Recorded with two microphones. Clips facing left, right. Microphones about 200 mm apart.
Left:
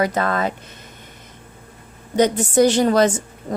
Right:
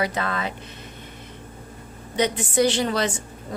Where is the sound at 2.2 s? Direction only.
45° left (ahead or behind).